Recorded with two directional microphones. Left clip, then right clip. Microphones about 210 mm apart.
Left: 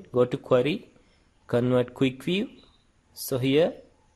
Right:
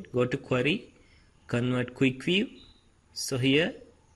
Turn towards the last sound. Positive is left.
turn(degrees=20)  # may be behind; listen again after turning